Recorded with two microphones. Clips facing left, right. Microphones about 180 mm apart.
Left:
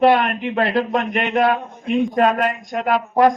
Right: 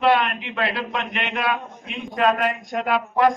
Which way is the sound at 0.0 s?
45° left (ahead or behind).